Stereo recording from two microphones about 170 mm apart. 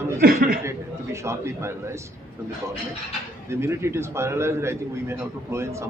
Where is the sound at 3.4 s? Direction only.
15° right (ahead or behind).